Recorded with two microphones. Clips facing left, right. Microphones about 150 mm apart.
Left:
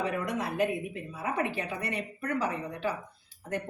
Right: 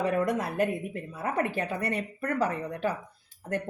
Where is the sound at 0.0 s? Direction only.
50° right (ahead or behind).